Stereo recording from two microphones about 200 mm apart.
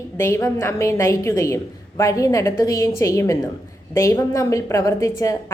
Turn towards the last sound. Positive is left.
turn(degrees=15)  # may be behind; listen again after turning